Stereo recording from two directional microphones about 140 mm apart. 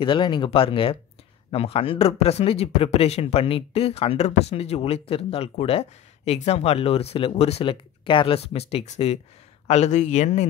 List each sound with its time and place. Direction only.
0.0 s speech: 35° left (ahead or behind); by 10.4 s 55° left (ahead or behind)